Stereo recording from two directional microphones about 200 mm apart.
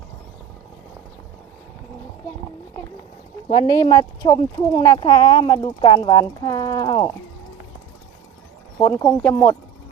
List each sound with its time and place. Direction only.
3.5 s speech: 25° left (ahead or behind)
8.8 s speech: 15° left (ahead or behind)